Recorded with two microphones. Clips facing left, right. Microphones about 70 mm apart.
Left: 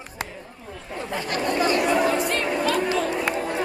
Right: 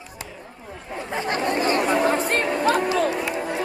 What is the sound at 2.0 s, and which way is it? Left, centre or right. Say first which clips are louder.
Music: right 1 dB; right.